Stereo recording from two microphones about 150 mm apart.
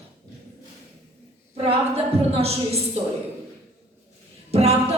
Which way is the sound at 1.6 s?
40° right (ahead or behind).